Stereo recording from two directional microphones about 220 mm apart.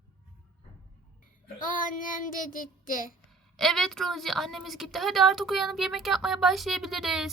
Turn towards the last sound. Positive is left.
turn(degrees=0)  # may be behind; listen again after turning